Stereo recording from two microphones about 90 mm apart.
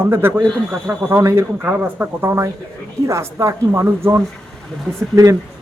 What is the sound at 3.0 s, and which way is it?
Speech, 35° right (ahead or behind).